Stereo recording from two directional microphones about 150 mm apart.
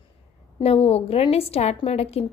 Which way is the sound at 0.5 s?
40° left (ahead or behind).